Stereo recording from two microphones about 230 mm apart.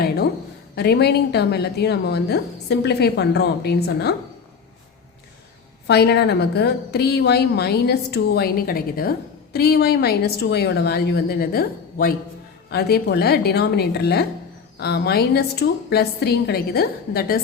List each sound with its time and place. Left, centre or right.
0.8 s a woman's voice: left
5.9 s a woman's voice: left